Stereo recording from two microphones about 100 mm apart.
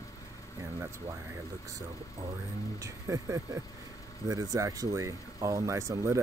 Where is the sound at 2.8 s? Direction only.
35° right (ahead or behind).